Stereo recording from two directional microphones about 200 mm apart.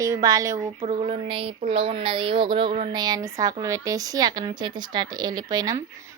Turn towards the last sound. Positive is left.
turn(degrees=-20)  # may be behind; listen again after turning